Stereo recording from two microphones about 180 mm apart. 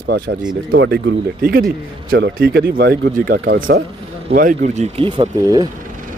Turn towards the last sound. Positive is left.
turn(degrees=-20)  # may be behind; listen again after turning